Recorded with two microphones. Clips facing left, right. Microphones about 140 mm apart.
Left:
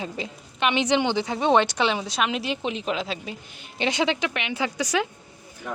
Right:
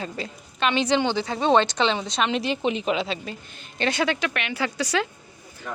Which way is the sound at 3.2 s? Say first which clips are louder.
Even; 10° left (ahead or behind).